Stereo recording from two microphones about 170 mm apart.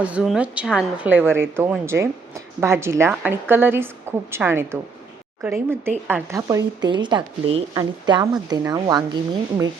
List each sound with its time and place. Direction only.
0.0 s a woman's voice: 5° right (ahead or behind); by 9.0 s 25° right (ahead or behind)